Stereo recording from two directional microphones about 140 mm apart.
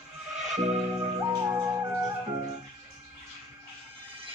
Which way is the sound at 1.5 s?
15° right (ahead or behind).